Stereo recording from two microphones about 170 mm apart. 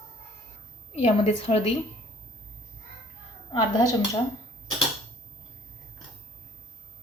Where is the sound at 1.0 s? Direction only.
35° left (ahead or behind).